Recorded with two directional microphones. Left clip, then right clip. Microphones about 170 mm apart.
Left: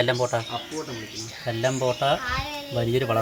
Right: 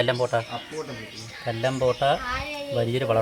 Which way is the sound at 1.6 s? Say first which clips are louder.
Right 1 dB; 10° right (ahead or behind).